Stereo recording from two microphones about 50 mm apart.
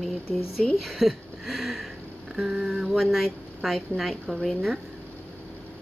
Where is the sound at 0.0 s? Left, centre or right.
Centre.